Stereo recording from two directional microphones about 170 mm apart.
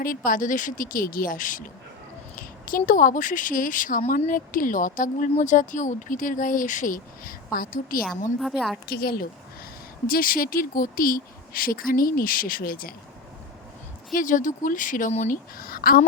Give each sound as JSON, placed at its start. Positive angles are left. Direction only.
{"t": 0.3, "sound": "a woman's voice", "side_deg": 50}
{"t": 8.4, "sound": "a woman's voice", "side_deg": 0}
{"t": 8.9, "sound": "speech", "side_deg": 65}
{"t": 14.1, "sound": "speech", "side_deg": 50}
{"t": 15.5, "sound": "speech", "side_deg": 60}